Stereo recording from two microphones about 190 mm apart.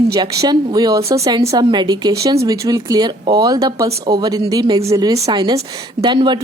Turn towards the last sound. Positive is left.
turn(degrees=-25)  # may be behind; listen again after turning